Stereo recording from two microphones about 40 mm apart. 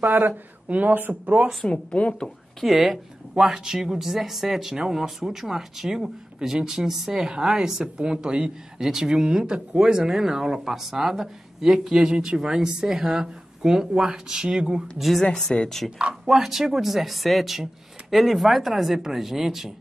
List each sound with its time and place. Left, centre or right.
0.0 s speech: right
0.7 s speech: right
1.2 s speech: right
1.6 s speech: left
2.2 s speech: centre; by 8.5 s right
8.7 s speech: centre
15.0 s speech: centre
15.5 s speech: left
16.3 s speech: centre